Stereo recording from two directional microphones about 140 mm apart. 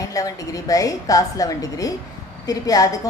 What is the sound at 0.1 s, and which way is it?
A woman's voice, 25° left (ahead or behind).